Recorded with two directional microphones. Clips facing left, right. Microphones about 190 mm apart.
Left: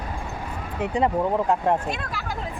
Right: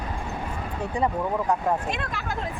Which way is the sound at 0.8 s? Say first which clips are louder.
Left 4 dB; 20° left (ahead or behind).